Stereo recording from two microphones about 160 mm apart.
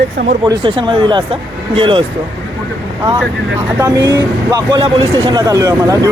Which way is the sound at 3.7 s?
25° right (ahead or behind).